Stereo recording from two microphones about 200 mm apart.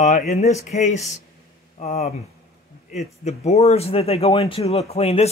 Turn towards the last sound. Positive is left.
turn(degrees=30)  # may be behind; listen again after turning